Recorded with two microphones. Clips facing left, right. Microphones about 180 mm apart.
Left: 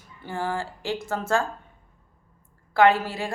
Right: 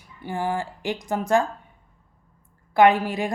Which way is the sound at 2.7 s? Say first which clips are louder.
Right 2 dB; 15° right (ahead or behind).